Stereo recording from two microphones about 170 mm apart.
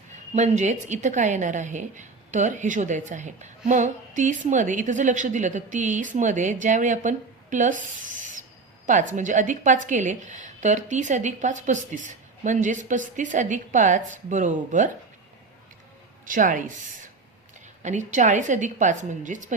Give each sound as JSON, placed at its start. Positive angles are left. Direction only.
{"t": 0.3, "sound": "a woman's voice", "side_deg": -45}
{"t": 16.2, "sound": "a woman's voice", "side_deg": -50}
{"t": 17.8, "sound": "a woman's voice", "side_deg": -45}